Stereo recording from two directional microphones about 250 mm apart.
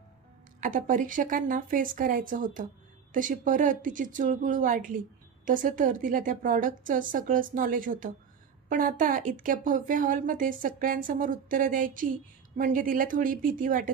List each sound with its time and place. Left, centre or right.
0.6 s a woman's voice: right